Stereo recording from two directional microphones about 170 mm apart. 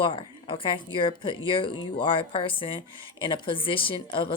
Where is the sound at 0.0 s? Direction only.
30° left (ahead or behind).